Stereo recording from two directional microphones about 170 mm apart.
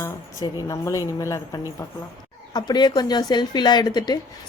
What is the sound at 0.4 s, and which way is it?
A woman's voice, 20° left (ahead or behind).